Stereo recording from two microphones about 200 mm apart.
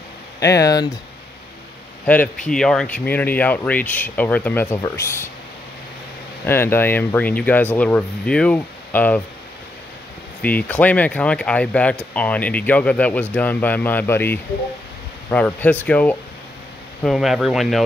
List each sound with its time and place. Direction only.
0.4 s speech: 15° left (ahead or behind)
2.0 s speech: 5° left (ahead or behind)
6.4 s speech: 10° left (ahead or behind)
10.4 s speech: 5° left (ahead or behind)